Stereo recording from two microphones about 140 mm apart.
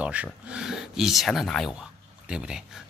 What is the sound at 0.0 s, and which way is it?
Speech, 10° right (ahead or behind).